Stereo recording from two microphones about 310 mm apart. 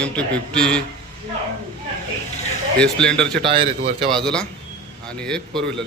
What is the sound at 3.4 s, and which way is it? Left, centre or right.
Speech, centre.